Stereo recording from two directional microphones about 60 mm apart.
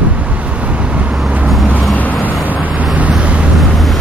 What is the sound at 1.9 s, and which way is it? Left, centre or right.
Vehicle, left.